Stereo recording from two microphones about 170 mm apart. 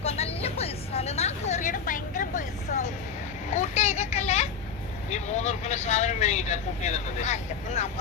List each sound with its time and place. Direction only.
0.0 s vehicle: 35° left (ahead or behind)
3.5 s a sound: 45° left (ahead or behind)
5.1 s speech: 40° left (ahead or behind)